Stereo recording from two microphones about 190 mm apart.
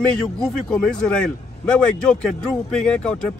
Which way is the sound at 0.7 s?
5° left (ahead or behind).